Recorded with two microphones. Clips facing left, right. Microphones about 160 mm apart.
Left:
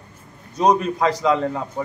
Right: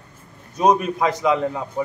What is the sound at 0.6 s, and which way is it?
Speech, 5° right (ahead or behind).